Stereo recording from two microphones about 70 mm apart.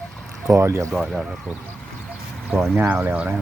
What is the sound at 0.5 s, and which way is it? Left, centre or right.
Speech, right.